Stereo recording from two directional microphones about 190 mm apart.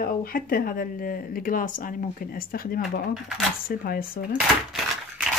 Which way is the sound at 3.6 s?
50° left (ahead or behind).